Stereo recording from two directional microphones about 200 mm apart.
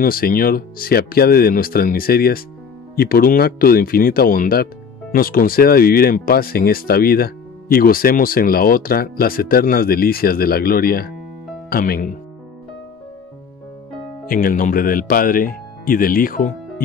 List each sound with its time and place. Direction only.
0.0 s speech: 45° left (ahead or behind)
14.2 s speech: 45° left (ahead or behind)